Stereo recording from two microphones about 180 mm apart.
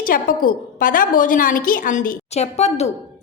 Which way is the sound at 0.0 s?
50° left (ahead or behind).